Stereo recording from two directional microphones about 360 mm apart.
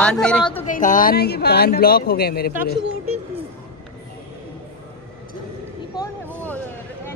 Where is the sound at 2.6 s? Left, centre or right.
Right.